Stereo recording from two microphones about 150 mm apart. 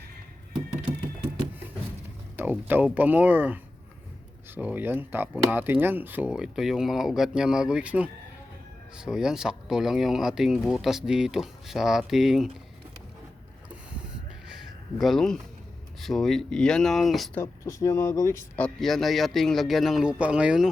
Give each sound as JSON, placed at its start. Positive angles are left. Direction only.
{"t": 2.3, "sound": "speech", "side_deg": -10}
{"t": 14.4, "sound": "a sound", "side_deg": 0}
{"t": 16.0, "sound": "speech", "side_deg": 0}
{"t": 17.3, "sound": "speech", "side_deg": 20}
{"t": 18.6, "sound": "speech", "side_deg": 0}